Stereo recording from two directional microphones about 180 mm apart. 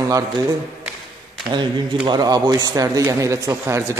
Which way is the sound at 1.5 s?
25° right (ahead or behind).